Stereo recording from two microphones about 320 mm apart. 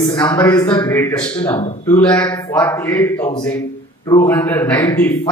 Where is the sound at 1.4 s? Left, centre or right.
Centre.